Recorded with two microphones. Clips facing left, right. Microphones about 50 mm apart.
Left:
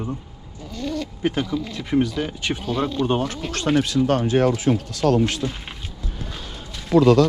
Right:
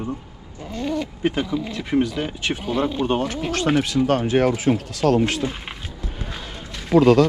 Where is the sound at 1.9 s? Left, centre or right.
Right.